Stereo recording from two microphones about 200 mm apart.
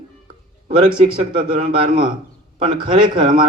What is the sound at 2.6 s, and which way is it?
Speech, 25° right (ahead or behind).